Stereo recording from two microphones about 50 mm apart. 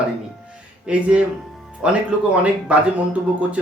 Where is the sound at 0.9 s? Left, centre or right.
Right.